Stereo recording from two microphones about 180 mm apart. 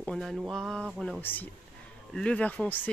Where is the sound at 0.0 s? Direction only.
Centre (ahead or behind).